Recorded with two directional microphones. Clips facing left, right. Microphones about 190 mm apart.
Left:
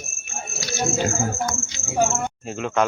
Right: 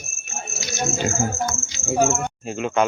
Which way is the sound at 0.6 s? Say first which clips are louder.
Left 1 dB; 20° right (ahead or behind).